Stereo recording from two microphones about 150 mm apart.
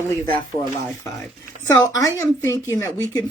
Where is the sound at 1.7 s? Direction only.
20° left (ahead or behind).